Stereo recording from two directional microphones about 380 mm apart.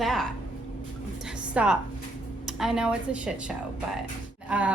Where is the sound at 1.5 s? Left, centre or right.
Centre.